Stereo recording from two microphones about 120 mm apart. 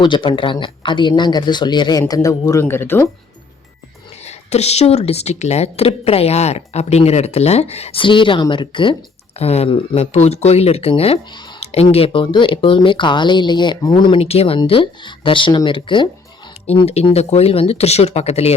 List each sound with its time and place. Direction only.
0.0 s speech: 40° left (ahead or behind); by 3.1 s 20° left (ahead or behind)
4.3 s speech: 65° left (ahead or behind); by 9.0 s 45° left (ahead or behind)
9.4 s speech: 60° left (ahead or behind); by 14.2 s 40° left (ahead or behind)
14.2 s speech: 55° left (ahead or behind)
16.8 s speech: 60° left (ahead or behind)